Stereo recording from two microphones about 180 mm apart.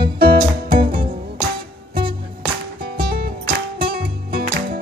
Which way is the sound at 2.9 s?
55° right (ahead or behind).